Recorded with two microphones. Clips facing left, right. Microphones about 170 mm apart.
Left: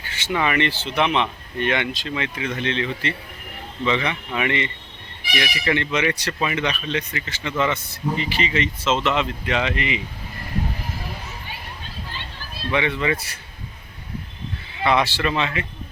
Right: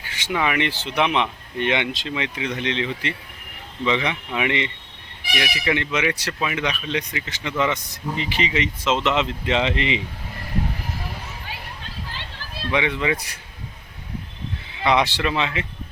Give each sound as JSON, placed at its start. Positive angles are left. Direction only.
{"t": 0.0, "sound": "speech", "side_deg": -10}
{"t": 12.7, "sound": "speech", "side_deg": -15}
{"t": 14.8, "sound": "speech", "side_deg": -20}